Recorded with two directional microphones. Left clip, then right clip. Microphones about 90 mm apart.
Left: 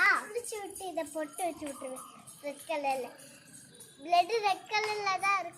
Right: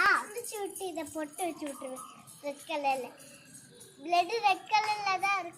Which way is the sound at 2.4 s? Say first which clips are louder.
Right 1 dB; 25° left (ahead or behind).